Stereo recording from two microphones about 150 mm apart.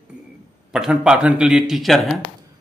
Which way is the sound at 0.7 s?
5° right (ahead or behind).